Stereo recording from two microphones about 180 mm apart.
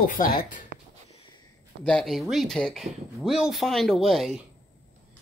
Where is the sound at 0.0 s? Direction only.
50° left (ahead or behind).